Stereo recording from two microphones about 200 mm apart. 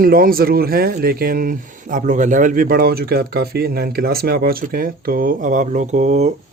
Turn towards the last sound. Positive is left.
turn(degrees=-35)  # may be behind; listen again after turning